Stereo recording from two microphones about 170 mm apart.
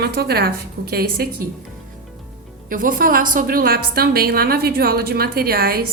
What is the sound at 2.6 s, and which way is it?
A woman's voice, 55° right (ahead or behind).